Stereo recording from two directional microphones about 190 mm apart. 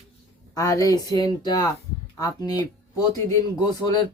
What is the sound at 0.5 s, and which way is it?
A man's voice, 15° left (ahead or behind).